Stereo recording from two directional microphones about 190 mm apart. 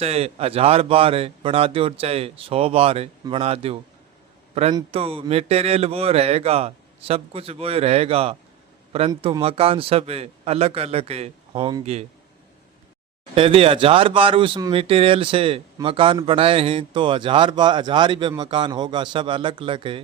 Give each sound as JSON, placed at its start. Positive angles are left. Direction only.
{"t": 0.0, "sound": "speech", "side_deg": -35}
{"t": 13.3, "sound": "speech", "side_deg": -30}